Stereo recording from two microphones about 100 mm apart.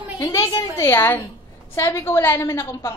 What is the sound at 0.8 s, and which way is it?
A man's voice, 25° left (ahead or behind).